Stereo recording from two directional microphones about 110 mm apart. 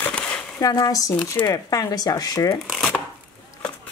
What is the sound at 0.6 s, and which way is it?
Speech, 35° left (ahead or behind).